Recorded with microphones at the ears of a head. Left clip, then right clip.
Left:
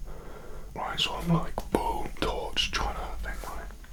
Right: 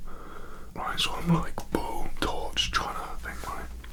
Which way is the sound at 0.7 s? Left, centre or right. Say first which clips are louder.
Even; centre.